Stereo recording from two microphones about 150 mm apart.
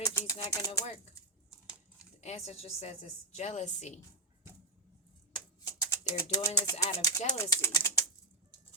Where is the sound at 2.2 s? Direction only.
45° left (ahead or behind).